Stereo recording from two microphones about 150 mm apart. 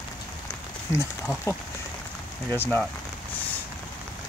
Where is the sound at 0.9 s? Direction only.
15° left (ahead or behind).